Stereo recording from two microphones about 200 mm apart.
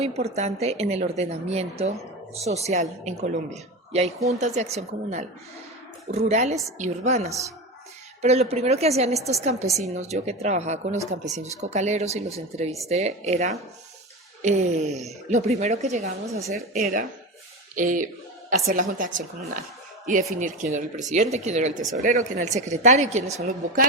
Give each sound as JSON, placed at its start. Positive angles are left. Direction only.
{"t": 0.0, "sound": "speech", "side_deg": -30}
{"t": 16.7, "sound": "speech", "side_deg": -45}